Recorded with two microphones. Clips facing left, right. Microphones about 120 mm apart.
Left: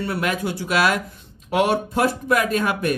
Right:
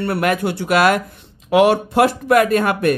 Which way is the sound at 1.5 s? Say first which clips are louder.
Right 6 dB; 90° right.